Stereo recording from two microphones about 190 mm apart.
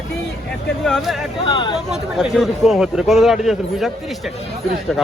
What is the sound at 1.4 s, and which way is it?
Speech, 25° left (ahead or behind).